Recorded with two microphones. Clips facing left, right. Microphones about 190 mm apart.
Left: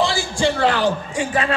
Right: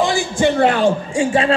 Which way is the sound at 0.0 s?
20° right (ahead or behind).